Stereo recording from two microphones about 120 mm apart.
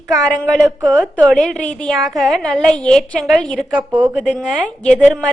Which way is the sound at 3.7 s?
10° right (ahead or behind).